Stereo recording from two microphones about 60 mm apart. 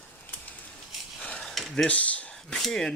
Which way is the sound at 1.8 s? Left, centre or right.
Left.